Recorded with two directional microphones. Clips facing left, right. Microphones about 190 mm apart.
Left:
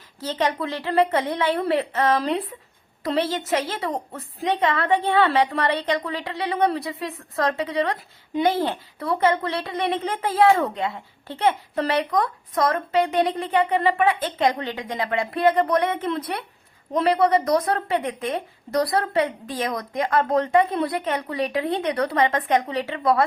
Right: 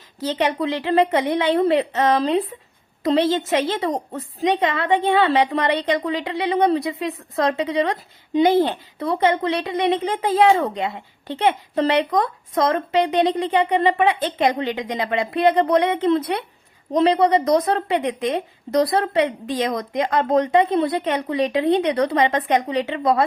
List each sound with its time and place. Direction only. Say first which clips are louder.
0.4 s a woman's voice: right 3 dB; 15° right (ahead or behind)
1.5 s a woman's voice: right 5 dB; 25° right (ahead or behind)